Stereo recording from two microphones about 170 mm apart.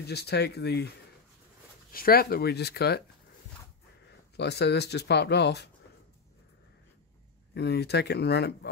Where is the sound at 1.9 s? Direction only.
60° left (ahead or behind).